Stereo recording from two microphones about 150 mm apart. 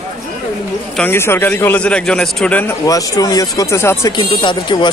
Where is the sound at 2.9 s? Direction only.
25° left (ahead or behind).